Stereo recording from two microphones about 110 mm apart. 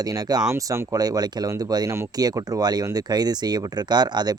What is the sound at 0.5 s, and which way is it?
Speech, 25° right (ahead or behind).